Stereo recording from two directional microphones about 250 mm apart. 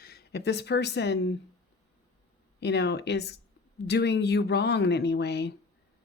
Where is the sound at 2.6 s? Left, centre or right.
Left.